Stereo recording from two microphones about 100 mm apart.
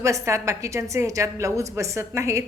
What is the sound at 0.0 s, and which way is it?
A woman's voice, 30° right (ahead or behind).